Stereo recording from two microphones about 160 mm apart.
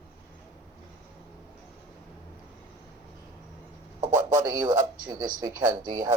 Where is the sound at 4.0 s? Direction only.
20° right (ahead or behind).